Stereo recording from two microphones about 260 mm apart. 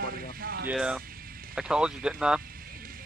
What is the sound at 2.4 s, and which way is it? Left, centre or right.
Vehicle, right.